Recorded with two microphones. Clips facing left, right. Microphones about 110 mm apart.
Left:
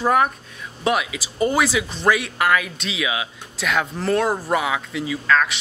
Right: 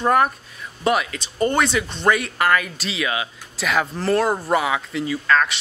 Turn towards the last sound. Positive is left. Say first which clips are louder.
# even
turn(degrees=0)  # may be behind; listen again after turning